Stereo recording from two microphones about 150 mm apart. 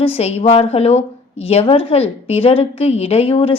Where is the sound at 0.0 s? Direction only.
40° left (ahead or behind).